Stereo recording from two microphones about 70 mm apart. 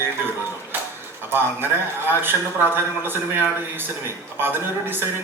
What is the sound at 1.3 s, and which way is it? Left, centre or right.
A man's voice, right.